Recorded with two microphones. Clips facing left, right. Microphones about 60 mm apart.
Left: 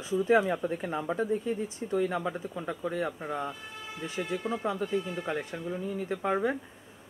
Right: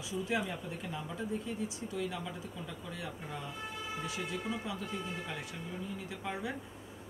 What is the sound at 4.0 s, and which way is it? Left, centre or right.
Speech, left.